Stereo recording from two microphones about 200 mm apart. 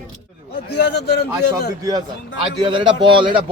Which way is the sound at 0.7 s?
55° left (ahead or behind).